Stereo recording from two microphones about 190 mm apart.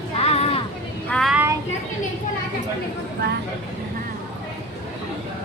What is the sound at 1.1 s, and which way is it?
Speech, centre (ahead or behind).